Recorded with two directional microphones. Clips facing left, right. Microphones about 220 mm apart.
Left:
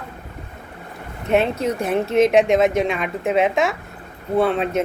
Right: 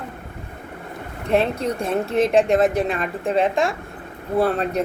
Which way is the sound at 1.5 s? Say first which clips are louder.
Left 2 dB; 30° right (ahead or behind).